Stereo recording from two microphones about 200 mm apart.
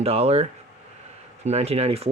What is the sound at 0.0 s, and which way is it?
Speech, 30° right (ahead or behind).